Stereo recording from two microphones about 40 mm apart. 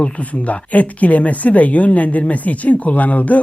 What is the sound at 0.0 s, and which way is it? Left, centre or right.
Speech, left.